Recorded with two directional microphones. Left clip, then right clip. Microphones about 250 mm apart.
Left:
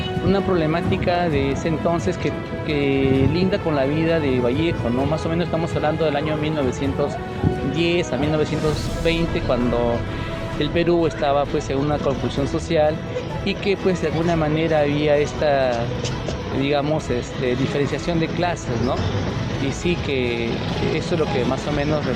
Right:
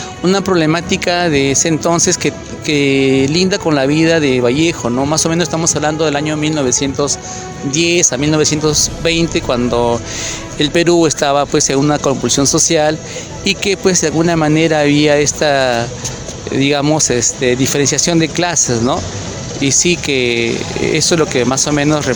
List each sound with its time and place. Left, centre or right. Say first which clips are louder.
0.3 s speech: right 8 dB; right
7.8 s speech: right 9 dB; right